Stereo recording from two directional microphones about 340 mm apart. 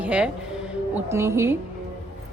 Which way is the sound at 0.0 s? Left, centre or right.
Centre.